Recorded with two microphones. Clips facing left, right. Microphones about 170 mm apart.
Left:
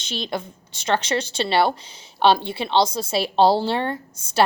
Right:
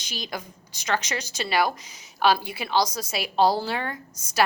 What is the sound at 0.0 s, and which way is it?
A woman's voice, 25° left (ahead or behind).